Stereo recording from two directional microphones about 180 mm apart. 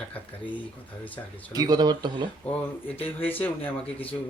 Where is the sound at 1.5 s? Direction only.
20° right (ahead or behind).